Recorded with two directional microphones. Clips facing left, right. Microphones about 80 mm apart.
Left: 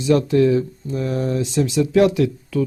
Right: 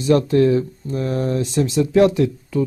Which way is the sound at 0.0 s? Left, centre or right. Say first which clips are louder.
Right 1 dB; right.